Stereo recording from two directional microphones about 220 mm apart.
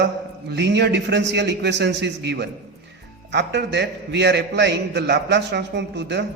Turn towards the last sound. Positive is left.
turn(degrees=-50)  # may be behind; listen again after turning